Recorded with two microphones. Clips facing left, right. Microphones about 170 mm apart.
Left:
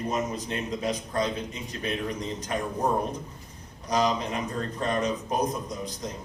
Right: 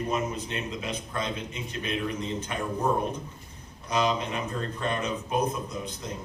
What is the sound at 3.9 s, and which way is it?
A man's voice, 35° left (ahead or behind).